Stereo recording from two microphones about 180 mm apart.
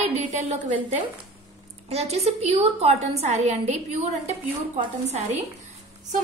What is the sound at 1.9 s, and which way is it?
A woman's voice, 35° right (ahead or behind).